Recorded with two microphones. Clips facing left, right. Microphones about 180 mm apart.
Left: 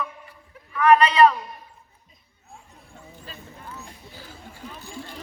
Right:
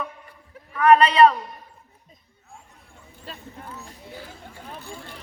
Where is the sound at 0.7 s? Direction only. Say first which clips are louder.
Right 1 dB; 30° right (ahead or behind).